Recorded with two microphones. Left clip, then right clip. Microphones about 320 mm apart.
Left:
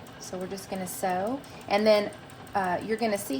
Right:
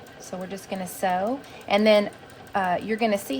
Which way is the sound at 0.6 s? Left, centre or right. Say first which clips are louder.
Right 5 dB; right.